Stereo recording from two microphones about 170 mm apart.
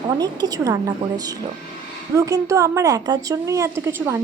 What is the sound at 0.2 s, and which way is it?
A woman's voice, 25° right (ahead or behind).